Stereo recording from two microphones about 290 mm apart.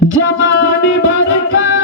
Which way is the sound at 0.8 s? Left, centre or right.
Left.